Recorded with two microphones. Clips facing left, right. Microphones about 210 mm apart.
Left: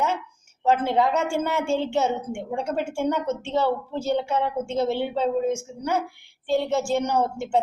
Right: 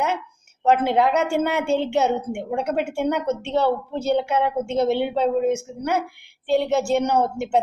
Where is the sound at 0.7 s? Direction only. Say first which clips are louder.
Right 3 dB; 65° right (ahead or behind).